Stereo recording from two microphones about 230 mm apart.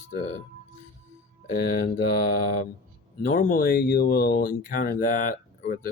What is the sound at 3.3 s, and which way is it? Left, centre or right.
Speech, left.